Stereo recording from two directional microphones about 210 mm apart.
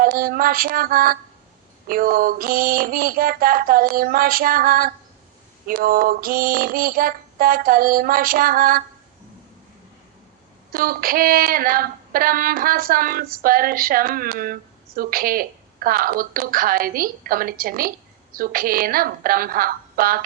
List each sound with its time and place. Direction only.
0.0 s a woman's voice: 45° right (ahead or behind)
10.7 s a woman's voice: 45° right (ahead or behind)